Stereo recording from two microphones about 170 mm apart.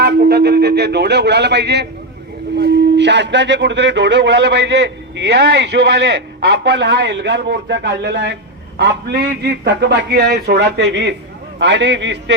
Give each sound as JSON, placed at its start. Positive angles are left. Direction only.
{"t": 0.0, "sound": "a man's voice", "side_deg": -70}